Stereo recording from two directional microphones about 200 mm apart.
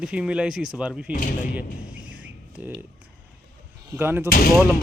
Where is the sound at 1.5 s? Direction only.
5° right (ahead or behind).